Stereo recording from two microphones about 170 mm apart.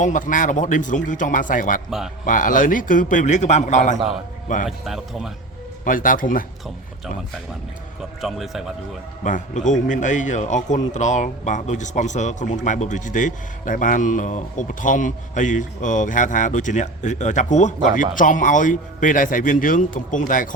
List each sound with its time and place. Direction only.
0.0 s a man's voice: 50° left (ahead or behind)
4.6 s a man's voice: centre (ahead or behind)
5.8 s a man's voice: 50° left (ahead or behind)
8.2 s a man's voice: centre (ahead or behind)
9.2 s a man's voice: 45° left (ahead or behind)